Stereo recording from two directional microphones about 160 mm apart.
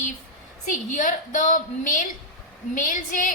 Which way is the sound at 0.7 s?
55° left (ahead or behind).